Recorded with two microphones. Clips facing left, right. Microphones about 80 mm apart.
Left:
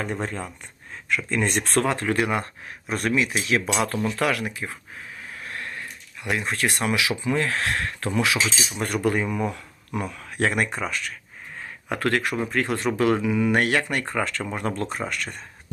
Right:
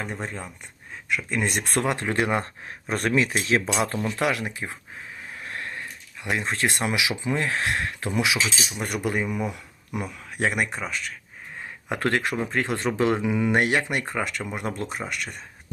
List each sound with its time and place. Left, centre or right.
0.0 s speech: centre
1.1 s speech: centre; by 2.4 s right
2.9 s speech: right
5.4 s a sound: right
6.2 s speech: right; by 11.1 s centre
11.9 s speech: right; by 15.4 s centre